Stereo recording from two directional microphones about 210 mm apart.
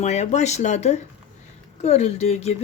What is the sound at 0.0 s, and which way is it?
A woman's voice, 35° left (ahead or behind).